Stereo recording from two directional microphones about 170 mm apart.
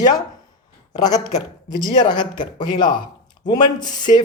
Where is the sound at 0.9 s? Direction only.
25° left (ahead or behind).